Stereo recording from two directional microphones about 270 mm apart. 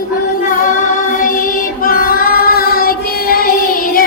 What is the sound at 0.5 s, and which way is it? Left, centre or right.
Child singing, left.